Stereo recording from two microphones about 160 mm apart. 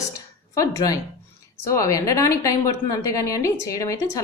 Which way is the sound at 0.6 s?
20° left (ahead or behind).